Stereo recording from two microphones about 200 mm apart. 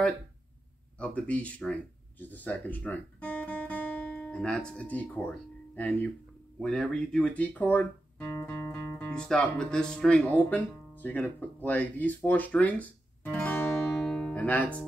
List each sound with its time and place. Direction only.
0.9 s speech: 5° left (ahead or behind)